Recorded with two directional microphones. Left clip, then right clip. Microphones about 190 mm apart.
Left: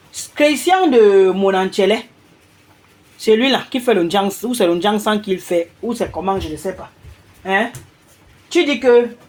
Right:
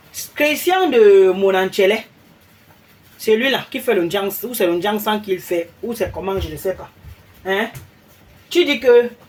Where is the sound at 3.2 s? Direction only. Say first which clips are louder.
Left 2 dB; 30° left (ahead or behind).